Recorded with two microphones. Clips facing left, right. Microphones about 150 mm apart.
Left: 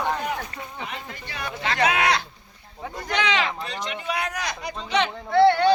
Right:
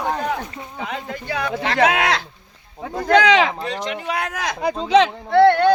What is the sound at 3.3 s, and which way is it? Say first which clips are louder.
Speech: right 8 dB; 80° right.